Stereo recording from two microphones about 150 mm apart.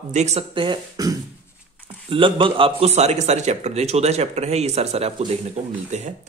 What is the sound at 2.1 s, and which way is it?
Speech, 35° right (ahead or behind).